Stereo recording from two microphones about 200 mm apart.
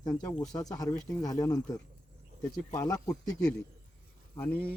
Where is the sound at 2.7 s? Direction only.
15° left (ahead or behind).